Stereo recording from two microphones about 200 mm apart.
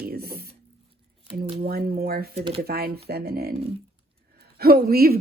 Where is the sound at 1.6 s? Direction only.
50° right (ahead or behind).